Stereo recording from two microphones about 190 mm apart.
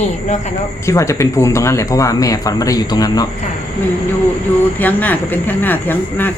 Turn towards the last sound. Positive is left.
turn(degrees=10)  # may be behind; listen again after turning